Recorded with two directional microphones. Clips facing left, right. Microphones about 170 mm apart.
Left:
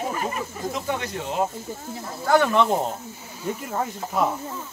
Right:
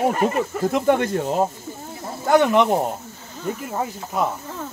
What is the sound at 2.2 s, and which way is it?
Speech, 20° right (ahead or behind).